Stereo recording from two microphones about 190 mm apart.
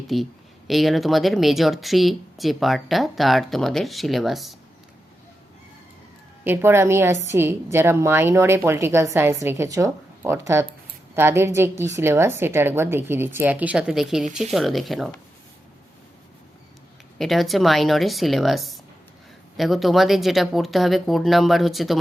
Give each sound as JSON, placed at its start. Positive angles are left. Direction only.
{"t": 0.1, "sound": "speech", "side_deg": 0}
{"t": 6.4, "sound": "a woman's voice", "side_deg": -10}
{"t": 17.2, "sound": "speech", "side_deg": 0}